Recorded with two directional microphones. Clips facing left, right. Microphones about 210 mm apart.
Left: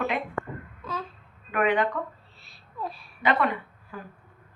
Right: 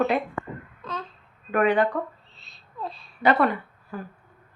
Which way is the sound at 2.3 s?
10° left (ahead or behind).